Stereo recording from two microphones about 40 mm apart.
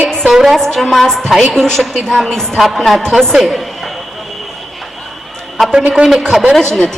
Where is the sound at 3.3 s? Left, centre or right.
Centre.